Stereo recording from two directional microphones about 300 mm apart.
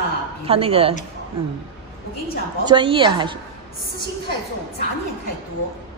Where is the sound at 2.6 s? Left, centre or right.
Centre.